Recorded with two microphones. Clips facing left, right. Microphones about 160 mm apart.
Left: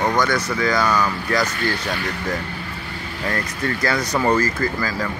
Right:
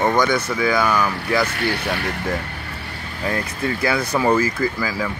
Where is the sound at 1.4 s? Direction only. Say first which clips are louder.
Right 1 dB; 65° right (ahead or behind).